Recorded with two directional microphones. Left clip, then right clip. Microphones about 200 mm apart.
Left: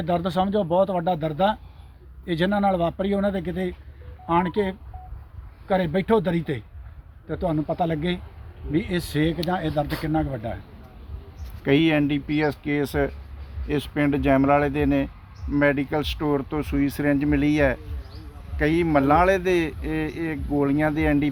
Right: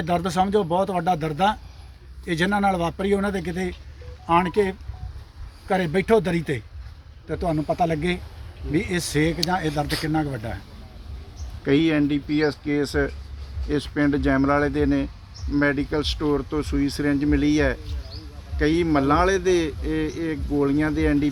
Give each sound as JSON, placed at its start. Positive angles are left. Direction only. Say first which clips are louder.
{"t": 0.0, "sound": "speech", "louder": "right 1 dB", "side_deg": 0}
{"t": 11.6, "sound": "speech", "louder": "even", "side_deg": 50}